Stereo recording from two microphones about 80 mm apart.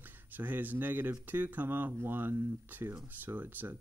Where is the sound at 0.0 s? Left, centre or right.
Right.